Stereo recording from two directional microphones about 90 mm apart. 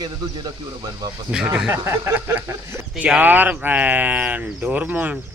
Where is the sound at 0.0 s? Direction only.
45° right (ahead or behind).